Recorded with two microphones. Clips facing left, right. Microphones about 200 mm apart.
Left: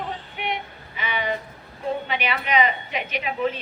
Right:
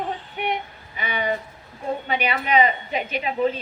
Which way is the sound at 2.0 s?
40° right (ahead or behind).